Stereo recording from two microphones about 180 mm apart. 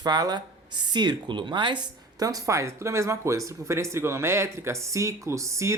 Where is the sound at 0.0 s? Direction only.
20° right (ahead or behind).